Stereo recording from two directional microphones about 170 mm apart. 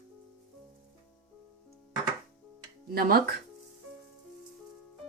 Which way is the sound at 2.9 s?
65° right (ahead or behind).